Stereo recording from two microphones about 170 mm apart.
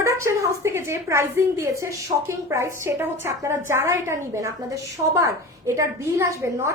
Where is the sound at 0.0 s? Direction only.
15° right (ahead or behind).